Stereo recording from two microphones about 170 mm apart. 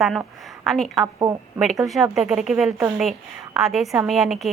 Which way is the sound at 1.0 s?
15° right (ahead or behind).